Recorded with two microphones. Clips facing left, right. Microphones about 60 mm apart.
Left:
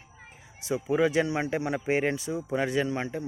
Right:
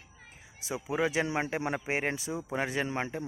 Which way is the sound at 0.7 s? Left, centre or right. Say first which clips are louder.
Left 5 dB; centre.